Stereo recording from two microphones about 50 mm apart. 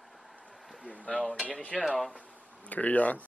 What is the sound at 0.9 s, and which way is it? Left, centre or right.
Speech, left.